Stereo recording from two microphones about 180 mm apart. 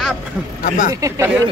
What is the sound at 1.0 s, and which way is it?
Speech, 20° right (ahead or behind).